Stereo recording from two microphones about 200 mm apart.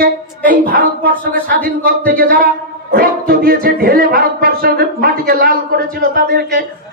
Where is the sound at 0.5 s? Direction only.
45° right (ahead or behind).